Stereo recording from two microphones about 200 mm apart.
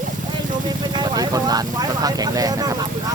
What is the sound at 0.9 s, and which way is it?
Speech, 20° right (ahead or behind).